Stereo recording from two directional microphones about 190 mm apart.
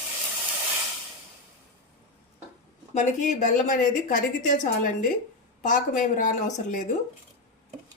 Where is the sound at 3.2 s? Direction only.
40° left (ahead or behind).